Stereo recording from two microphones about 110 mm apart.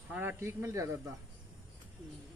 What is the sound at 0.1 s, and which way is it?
Speech, 15° right (ahead or behind).